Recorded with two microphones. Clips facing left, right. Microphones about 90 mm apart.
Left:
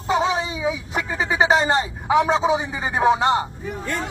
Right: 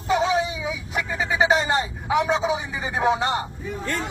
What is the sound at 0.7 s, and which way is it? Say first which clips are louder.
Vehicle: left 3 dB; 30° left (ahead or behind).